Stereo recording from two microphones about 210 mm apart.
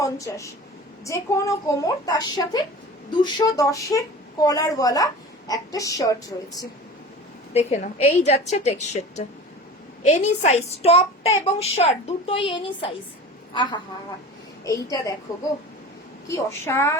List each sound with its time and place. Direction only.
0.0 s a woman's voice: 15° left (ahead or behind)
7.5 s a woman's voice: 30° left (ahead or behind); by 15.1 s 15° left (ahead or behind)
16.3 s a woman's voice: 10° left (ahead or behind)